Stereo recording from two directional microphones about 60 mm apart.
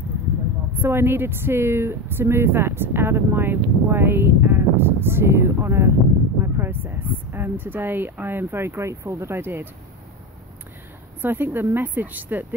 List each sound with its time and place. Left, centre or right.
0.7 s a woman's voice: right
6.4 s speech: right
11.1 s speech: right